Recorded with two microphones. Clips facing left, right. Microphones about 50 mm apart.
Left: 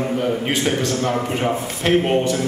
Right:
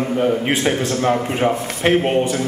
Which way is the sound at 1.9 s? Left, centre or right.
Centre.